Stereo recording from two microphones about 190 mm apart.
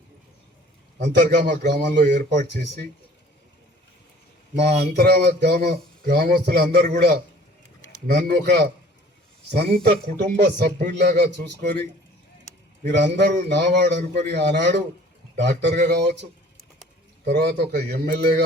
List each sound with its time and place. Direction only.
1.0 s speech: 40° right (ahead or behind)
1.4 s a man's voice: 60° right (ahead or behind)
2.1 s speech: 40° right (ahead or behind)
4.8 s a man's voice: 60° right (ahead or behind)
13.0 s a man's voice: 65° right (ahead or behind)
17.2 s a man's voice: 60° right (ahead or behind)